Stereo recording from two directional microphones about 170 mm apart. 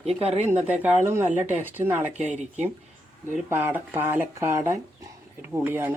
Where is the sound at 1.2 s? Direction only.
45° right (ahead or behind).